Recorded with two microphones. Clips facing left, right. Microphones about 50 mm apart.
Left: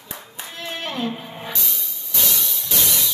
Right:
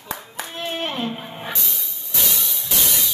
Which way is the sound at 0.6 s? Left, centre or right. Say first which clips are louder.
Right 2 dB; right.